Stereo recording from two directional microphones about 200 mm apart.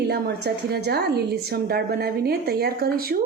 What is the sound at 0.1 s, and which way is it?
A woman's voice, 55° right (ahead or behind).